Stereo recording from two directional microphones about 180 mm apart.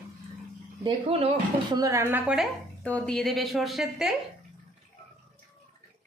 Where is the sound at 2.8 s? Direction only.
5° left (ahead or behind).